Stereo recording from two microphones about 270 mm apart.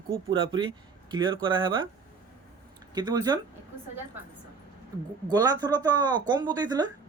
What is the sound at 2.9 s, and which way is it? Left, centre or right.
Speech, centre.